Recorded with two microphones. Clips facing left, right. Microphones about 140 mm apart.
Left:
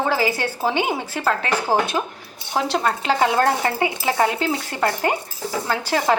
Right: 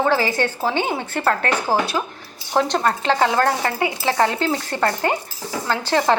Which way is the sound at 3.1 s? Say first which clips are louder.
Even; 15° left (ahead or behind).